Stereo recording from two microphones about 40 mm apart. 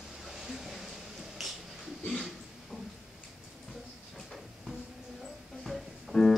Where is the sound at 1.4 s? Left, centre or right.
Centre.